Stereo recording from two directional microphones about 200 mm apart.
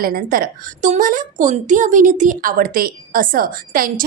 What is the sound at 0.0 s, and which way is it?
A woman's voice, 50° right (ahead or behind).